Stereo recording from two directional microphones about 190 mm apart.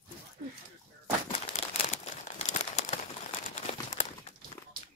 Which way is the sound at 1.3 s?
35° left (ahead or behind).